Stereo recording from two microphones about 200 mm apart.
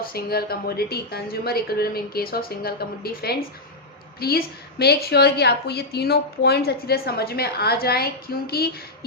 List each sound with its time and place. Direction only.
0.0 s a woman's voice: 50° left (ahead or behind)